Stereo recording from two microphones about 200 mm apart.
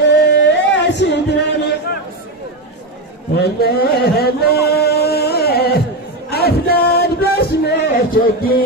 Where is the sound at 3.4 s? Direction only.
55° left (ahead or behind).